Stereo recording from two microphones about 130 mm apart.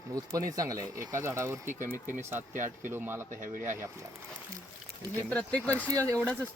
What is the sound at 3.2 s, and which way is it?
Speech, 85° right.